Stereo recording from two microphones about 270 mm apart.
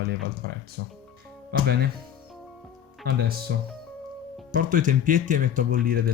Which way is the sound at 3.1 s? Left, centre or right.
Right.